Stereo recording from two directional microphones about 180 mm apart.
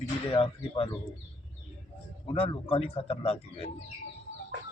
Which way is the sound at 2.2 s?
30° left (ahead or behind).